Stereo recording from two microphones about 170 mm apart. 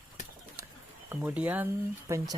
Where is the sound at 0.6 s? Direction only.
20° right (ahead or behind).